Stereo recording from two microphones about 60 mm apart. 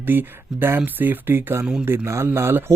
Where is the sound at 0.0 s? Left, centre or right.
Right.